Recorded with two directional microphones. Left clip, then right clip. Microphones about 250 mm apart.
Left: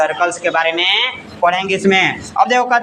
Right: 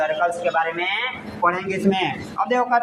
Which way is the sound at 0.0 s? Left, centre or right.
Left.